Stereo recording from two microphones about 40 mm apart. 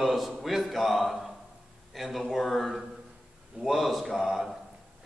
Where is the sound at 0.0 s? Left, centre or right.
Centre.